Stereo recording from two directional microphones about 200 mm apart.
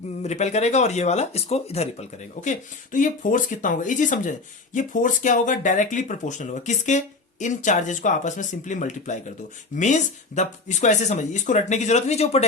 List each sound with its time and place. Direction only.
0.2 s speech: 35° left (ahead or behind)